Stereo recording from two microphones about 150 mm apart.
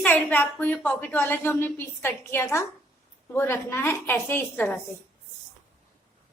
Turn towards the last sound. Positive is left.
turn(degrees=15)  # may be behind; listen again after turning